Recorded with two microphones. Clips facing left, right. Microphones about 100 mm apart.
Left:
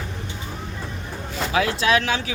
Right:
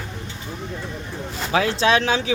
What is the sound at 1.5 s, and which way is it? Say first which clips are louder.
Speech: right 2 dB; 30° right (ahead or behind).